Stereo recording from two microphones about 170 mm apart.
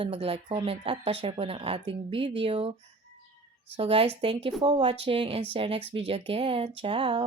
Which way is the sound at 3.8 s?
35° right (ahead or behind).